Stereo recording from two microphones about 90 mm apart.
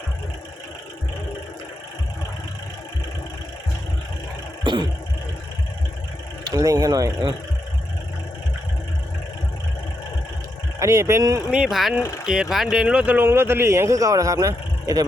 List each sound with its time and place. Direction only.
4.6 s music: 60° right (ahead or behind)
6.5 s speech: 40° right (ahead or behind)
10.8 s speech: 35° right (ahead or behind)
11.5 s mechanisms: 5° right (ahead or behind)
12.2 s speech: 5° right (ahead or behind)
13.2 s a man's voice: 25° right (ahead or behind); by 15.0 s 45° right (ahead or behind)